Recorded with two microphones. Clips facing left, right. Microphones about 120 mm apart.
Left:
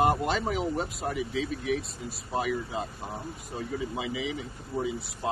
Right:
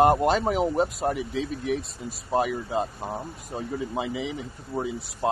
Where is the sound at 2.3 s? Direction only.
50° right (ahead or behind).